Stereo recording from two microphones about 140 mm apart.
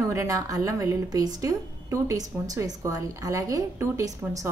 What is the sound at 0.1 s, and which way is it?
A woman's voice, 20° right (ahead or behind).